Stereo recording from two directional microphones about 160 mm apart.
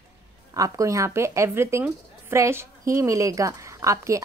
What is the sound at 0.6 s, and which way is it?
A woman's voice, 20° right (ahead or behind).